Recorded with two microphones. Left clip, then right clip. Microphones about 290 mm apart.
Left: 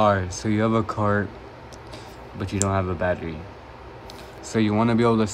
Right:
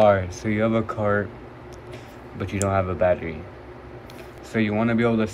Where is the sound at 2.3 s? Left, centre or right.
Centre.